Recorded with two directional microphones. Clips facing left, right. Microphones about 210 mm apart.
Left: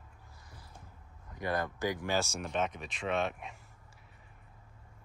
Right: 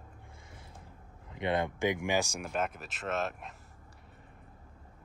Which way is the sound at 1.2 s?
25° right (ahead or behind).